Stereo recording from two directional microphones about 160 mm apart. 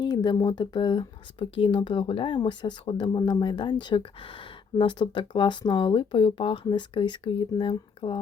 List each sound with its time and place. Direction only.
0.0 s speech: 25° left (ahead or behind)